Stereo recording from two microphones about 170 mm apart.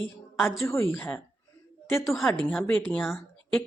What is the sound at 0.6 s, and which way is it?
Speech, 15° left (ahead or behind).